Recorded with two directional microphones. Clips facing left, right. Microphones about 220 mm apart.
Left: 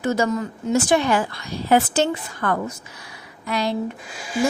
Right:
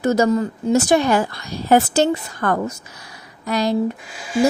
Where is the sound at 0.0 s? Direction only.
40° right (ahead or behind).